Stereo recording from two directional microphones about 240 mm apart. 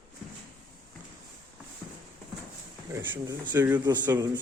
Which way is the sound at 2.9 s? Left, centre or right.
Centre.